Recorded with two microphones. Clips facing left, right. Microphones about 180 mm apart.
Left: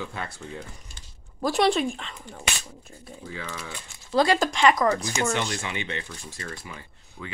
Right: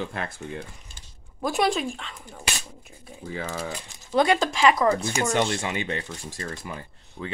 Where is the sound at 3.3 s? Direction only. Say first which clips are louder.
Right 6 dB; 50° right (ahead or behind).